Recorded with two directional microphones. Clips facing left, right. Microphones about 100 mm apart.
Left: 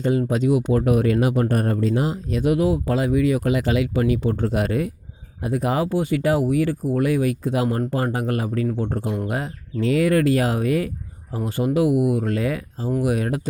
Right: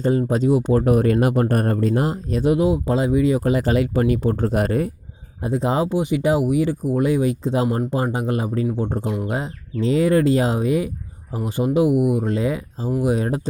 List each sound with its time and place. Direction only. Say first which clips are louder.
0.0 s speech: right 2 dB; 35° right (ahead or behind)
2.4 s speech: right 2 dB; 25° right (ahead or behind); by 4.9 s 40° right (ahead or behind)
5.4 s speech: right 1 dB; 25° right (ahead or behind)